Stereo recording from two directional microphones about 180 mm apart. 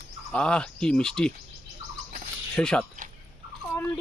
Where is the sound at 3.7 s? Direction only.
10° left (ahead or behind).